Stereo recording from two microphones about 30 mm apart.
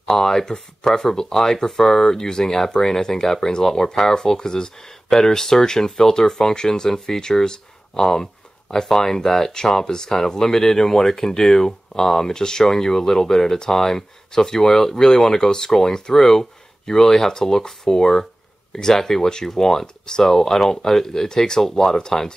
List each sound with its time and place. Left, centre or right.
0.1 s speech: centre